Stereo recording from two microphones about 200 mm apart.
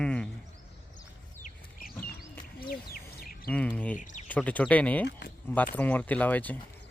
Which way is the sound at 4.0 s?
40° left (ahead or behind).